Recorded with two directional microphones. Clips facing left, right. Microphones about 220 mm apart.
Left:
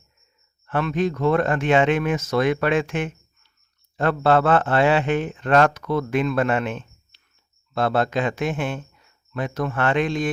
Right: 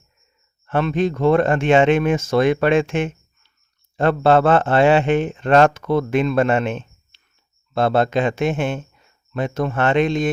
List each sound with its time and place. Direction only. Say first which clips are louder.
0.7 s a man's voice: right 3 dB; 25° right (ahead or behind)